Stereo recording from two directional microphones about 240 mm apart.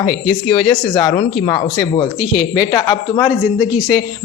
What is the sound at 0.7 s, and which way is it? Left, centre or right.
A woman's voice, centre.